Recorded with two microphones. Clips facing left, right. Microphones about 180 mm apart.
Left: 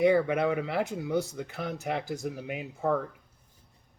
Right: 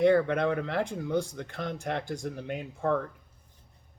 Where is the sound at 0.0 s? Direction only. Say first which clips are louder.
Even; 10° left (ahead or behind).